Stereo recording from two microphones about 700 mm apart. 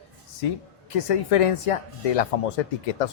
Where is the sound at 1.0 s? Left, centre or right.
Left.